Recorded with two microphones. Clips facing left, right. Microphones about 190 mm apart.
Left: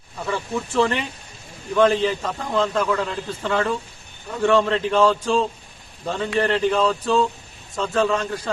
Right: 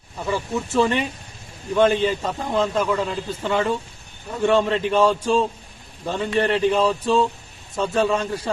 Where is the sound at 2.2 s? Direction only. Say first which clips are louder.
Right 2 dB; 20° right (ahead or behind).